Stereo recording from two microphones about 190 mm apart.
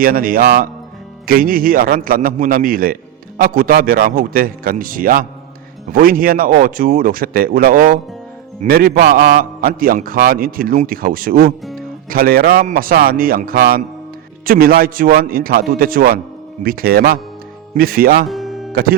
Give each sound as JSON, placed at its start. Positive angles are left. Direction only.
{"t": 0.0, "sound": "a man's voice", "side_deg": -50}
{"t": 18.3, "sound": "music", "side_deg": 0}
{"t": 18.7, "sound": "music", "side_deg": -50}